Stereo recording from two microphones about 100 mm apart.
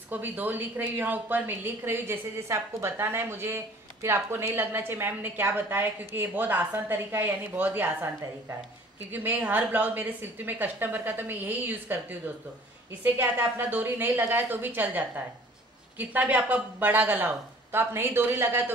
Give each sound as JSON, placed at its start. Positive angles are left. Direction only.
{"t": 0.1, "sound": "a woman's voice", "side_deg": -20}